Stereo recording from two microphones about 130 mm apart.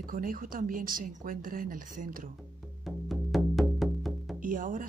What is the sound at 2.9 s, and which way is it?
Music, centre (ahead or behind).